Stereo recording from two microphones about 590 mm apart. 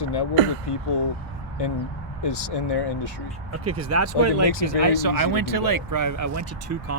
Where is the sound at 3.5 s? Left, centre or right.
Right.